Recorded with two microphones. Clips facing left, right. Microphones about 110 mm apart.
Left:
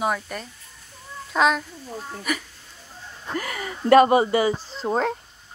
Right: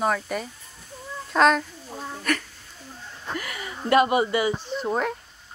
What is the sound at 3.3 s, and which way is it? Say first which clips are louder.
Speech: left 4 dB; 40° left (ahead or behind).